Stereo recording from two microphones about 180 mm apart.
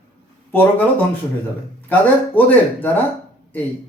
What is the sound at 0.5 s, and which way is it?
A man's voice, 10° left (ahead or behind).